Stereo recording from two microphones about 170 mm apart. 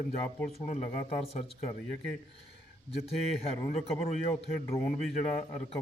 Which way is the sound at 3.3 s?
35° left (ahead or behind).